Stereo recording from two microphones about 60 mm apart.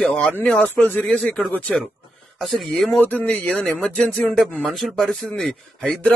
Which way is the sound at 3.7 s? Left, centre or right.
Centre.